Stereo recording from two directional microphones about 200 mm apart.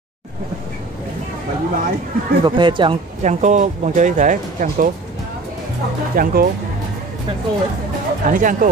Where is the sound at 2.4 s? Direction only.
25° right (ahead or behind).